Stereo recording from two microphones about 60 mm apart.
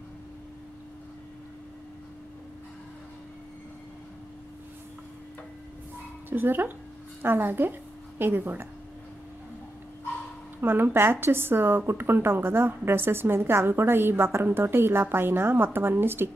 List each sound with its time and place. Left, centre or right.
6.3 s a woman's voice: right
10.6 s a woman's voice: right